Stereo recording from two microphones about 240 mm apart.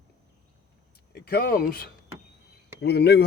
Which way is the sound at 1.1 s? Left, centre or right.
Left.